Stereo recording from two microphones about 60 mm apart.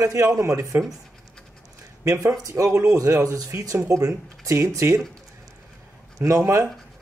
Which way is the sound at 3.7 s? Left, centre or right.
Right.